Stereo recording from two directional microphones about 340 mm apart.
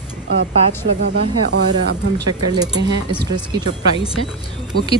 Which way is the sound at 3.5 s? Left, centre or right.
Centre.